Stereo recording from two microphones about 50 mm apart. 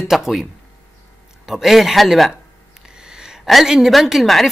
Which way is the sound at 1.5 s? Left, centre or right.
Centre.